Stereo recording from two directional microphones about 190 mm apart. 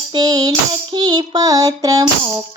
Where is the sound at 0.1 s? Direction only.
20° right (ahead or behind).